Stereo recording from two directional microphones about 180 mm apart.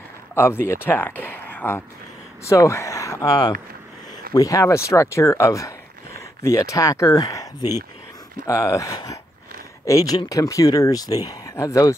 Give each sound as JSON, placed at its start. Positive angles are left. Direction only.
{"t": 0.3, "sound": "speech", "side_deg": 15}